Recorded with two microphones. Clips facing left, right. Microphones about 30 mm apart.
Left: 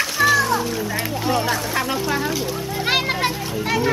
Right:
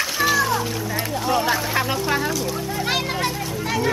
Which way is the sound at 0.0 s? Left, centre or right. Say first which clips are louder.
Left 3 dB; centre.